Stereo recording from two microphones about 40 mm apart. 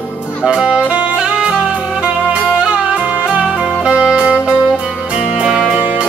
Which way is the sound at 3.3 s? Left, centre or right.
Centre.